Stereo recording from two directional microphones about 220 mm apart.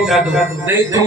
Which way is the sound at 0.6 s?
15° right (ahead or behind).